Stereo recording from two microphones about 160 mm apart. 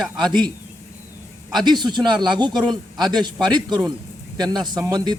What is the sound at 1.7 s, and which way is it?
A man's voice, 25° right (ahead or behind).